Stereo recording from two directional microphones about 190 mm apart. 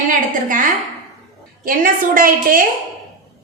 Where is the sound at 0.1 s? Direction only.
45° right (ahead or behind).